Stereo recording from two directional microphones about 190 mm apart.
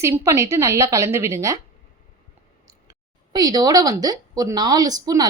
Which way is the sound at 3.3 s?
20° right (ahead or behind).